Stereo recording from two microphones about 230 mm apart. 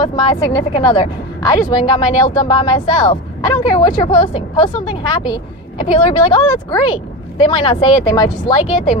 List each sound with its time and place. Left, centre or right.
0.0 s speech: centre